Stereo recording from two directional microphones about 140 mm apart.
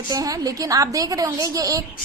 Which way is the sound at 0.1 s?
25° right (ahead or behind).